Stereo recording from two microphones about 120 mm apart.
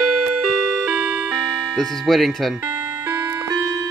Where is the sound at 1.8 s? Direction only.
Centre (ahead or behind).